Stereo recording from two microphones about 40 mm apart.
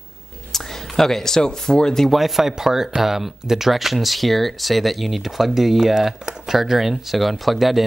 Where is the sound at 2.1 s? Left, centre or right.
Centre.